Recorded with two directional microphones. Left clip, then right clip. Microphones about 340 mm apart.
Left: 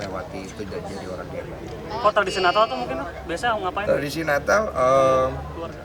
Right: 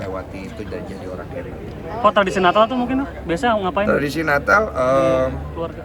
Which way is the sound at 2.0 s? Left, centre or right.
Centre.